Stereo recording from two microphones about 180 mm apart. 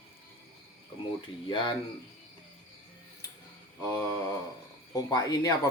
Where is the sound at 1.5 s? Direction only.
25° left (ahead or behind).